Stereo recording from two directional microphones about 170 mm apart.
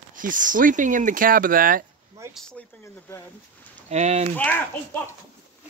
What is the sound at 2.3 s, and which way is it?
Speech, 5° left (ahead or behind).